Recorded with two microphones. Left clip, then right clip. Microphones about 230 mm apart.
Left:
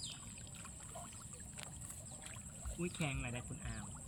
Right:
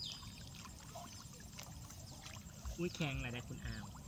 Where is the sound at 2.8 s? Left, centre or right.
Centre.